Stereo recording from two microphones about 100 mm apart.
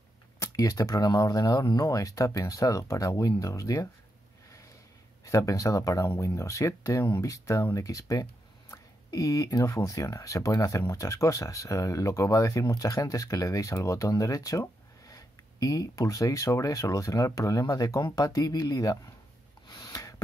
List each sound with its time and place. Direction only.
0.4 s speech: 35° left (ahead or behind)
5.2 s speech: 30° left (ahead or behind)
19.7 s a sound: 35° left (ahead or behind)